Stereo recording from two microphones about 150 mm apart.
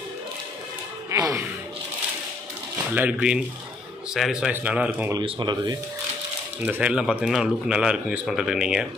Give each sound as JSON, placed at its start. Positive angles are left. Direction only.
{"t": 1.1, "sound": "music", "side_deg": -20}
{"t": 2.9, "sound": "speech", "side_deg": -10}
{"t": 5.2, "sound": "speech", "side_deg": -30}
{"t": 6.6, "sound": "a man's voice", "side_deg": -10}